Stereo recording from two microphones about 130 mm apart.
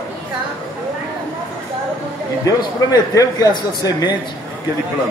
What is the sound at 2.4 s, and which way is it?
A man's voice, 25° left (ahead or behind).